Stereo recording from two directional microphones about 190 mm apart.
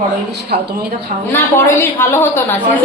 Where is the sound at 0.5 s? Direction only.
55° right (ahead or behind).